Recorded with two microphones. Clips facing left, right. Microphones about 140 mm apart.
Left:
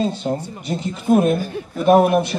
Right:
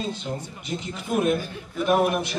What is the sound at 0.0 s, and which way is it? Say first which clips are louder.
A man's voice: left 9 dB; 35° left (ahead or behind).